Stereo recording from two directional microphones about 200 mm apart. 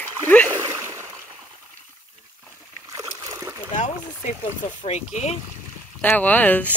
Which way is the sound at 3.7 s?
35° left (ahead or behind).